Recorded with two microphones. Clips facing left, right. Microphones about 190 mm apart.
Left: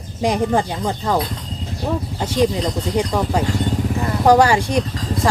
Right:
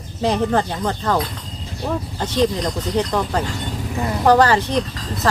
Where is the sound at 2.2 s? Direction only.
10° left (ahead or behind).